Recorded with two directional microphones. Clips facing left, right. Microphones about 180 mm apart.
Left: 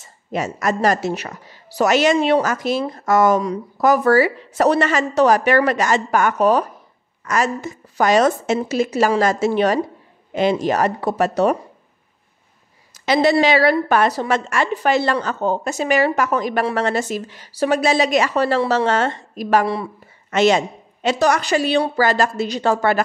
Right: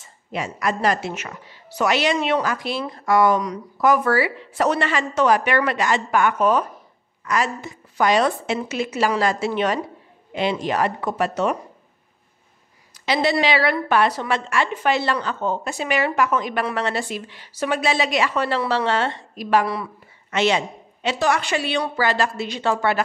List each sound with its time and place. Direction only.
0.0 s speech: 45° left (ahead or behind)
2.1 s a woman's voice: 30° left (ahead or behind)
2.4 s a woman's voice: 45° left (ahead or behind)
13.0 s a woman's voice: 45° left (ahead or behind)
19.6 s a woman's voice: 30° left (ahead or behind)
20.2 s a woman's voice: 45° left (ahead or behind)